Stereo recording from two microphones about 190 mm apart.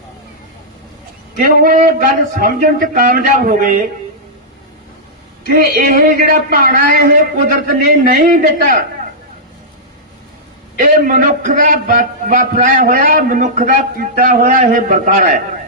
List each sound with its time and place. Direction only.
1.5 s a man's voice: 50° right (ahead or behind)
5.5 s a man's voice: 50° right (ahead or behind)
10.8 s a man's voice: 45° right (ahead or behind)